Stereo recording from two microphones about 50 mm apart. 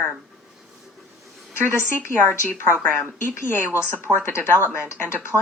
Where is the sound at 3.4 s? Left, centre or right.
Left.